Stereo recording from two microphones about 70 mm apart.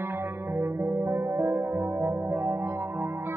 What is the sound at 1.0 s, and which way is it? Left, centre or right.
Music, right.